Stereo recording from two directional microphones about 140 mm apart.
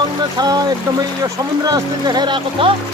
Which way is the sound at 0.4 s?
25° right (ahead or behind).